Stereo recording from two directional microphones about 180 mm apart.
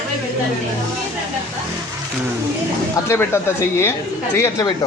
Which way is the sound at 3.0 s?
15° left (ahead or behind).